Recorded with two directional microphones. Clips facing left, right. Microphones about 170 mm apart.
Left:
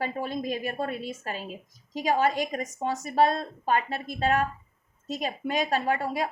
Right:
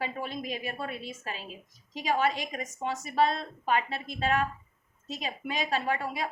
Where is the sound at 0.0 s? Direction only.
45° left (ahead or behind).